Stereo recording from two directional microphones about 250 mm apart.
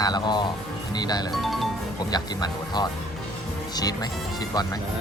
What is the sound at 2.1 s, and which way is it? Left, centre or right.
Speech, centre.